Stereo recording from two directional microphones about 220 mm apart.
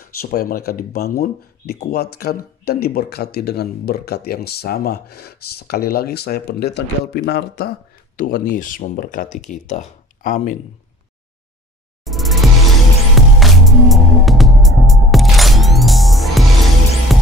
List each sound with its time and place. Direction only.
0.0 s speech: 45° left (ahead or behind)
12.0 s music: centre (ahead or behind)